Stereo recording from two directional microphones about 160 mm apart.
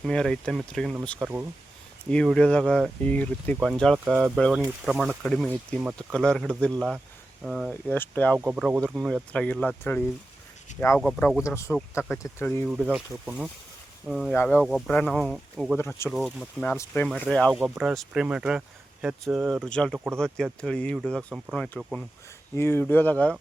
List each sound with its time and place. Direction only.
0.0 s speech: 5° left (ahead or behind)
7.7 s speech: 10° left (ahead or behind)
8.4 s speech: 5° right (ahead or behind)
11.4 s speech: 20° left (ahead or behind)
12.6 s speech: 5° right (ahead or behind)
15.8 s speech: 15° left (ahead or behind)
16.0 s speech: centre (ahead or behind)
17.1 s speech: 5° right (ahead or behind)
17.6 s speech: 10° right (ahead or behind)
22.5 s speech: 15° left (ahead or behind)